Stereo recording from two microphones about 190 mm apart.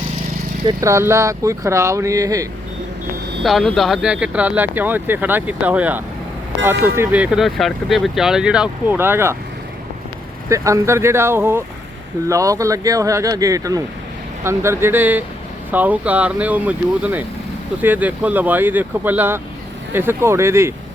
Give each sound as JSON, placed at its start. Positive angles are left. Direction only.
{"t": 0.6, "sound": "speech", "side_deg": -20}
{"t": 3.4, "sound": "speech", "side_deg": 0}
{"t": 10.5, "sound": "speech", "side_deg": -15}